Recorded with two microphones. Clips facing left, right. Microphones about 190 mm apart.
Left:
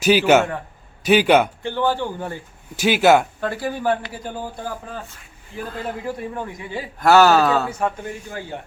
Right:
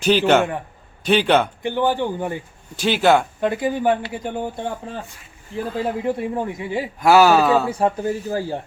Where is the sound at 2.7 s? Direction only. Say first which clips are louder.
Left 1 dB; 10° left (ahead or behind).